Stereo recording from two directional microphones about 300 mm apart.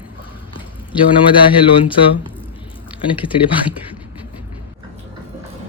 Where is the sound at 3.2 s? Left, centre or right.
Centre.